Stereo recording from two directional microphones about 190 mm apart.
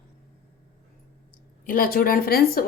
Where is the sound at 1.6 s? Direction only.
50° left (ahead or behind).